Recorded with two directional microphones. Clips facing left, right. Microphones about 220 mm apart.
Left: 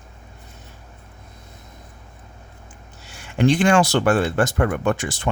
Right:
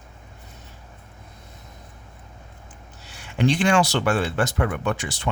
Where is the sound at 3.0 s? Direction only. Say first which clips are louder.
Left 3 dB; 50° left (ahead or behind).